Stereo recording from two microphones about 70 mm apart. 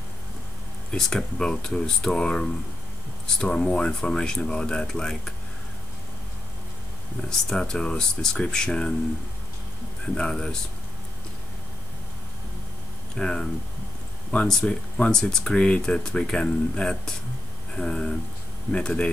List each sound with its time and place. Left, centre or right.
0.9 s speech: centre
7.2 s speech: centre
10.0 s speech: centre
13.1 s speech: centre
14.6 s speech: centre